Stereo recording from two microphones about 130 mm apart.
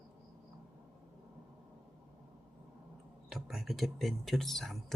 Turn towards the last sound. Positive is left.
turn(degrees=5)  # may be behind; listen again after turning